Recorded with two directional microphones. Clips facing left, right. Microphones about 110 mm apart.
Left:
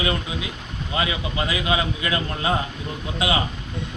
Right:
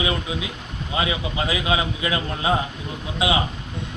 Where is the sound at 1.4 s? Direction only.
20° right (ahead or behind).